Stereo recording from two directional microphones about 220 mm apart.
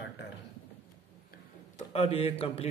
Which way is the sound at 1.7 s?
30° left (ahead or behind).